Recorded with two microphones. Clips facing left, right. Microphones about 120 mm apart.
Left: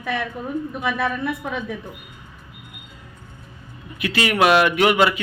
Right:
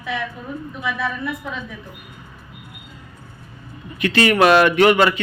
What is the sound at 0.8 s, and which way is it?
Speech, 60° left (ahead or behind).